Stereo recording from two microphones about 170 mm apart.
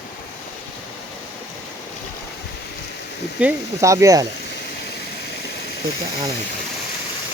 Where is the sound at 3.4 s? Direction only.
5° right (ahead or behind).